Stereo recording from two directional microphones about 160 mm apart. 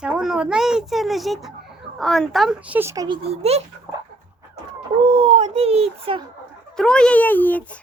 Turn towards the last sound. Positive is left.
turn(degrees=10)  # may be behind; listen again after turning